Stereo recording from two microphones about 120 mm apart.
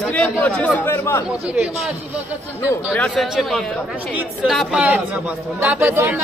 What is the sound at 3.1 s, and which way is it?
A man's voice, centre (ahead or behind).